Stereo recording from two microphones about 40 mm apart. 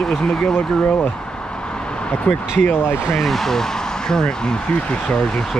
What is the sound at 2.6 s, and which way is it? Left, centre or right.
Speech, left.